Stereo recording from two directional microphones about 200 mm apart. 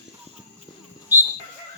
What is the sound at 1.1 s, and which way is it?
Music, 10° right (ahead or behind).